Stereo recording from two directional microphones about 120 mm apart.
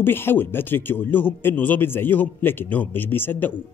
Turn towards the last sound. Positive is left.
turn(degrees=15)  # may be behind; listen again after turning